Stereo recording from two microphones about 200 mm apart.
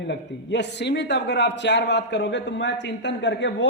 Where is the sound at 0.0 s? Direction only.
60° left (ahead or behind).